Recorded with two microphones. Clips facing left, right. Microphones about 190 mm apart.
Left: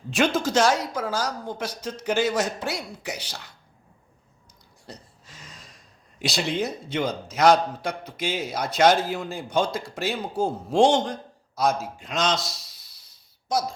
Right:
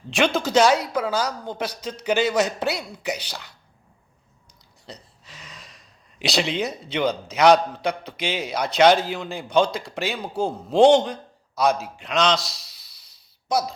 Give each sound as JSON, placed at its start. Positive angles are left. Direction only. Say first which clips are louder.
{"t": 0.1, "sound": "a man's voice", "louder": "right 2 dB", "side_deg": -65}
{"t": 4.9, "sound": "a man's voice", "louder": "right 1 dB", "side_deg": -65}